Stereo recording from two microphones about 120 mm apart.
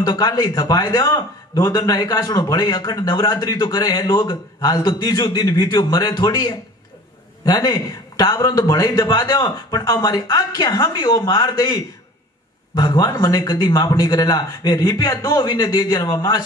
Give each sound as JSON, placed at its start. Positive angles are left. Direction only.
{"t": 0.0, "sound": "a man's voice", "side_deg": 35}